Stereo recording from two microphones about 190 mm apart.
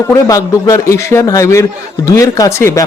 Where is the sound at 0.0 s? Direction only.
15° left (ahead or behind).